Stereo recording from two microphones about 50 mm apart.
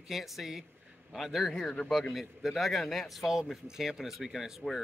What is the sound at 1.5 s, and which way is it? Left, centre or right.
Speech, centre.